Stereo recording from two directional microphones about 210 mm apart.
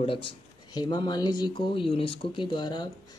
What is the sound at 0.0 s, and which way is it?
Speech, 25° left (ahead or behind).